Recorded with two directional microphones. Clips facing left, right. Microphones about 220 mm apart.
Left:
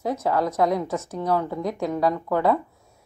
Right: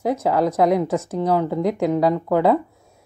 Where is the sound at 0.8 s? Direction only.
30° right (ahead or behind).